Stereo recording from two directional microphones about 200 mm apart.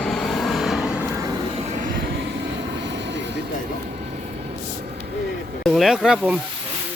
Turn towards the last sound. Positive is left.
turn(degrees=-5)  # may be behind; listen again after turning